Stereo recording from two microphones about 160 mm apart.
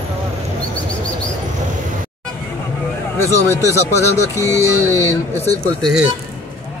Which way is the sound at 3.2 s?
20° left (ahead or behind).